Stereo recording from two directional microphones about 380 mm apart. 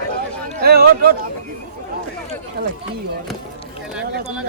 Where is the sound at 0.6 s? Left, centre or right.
Right.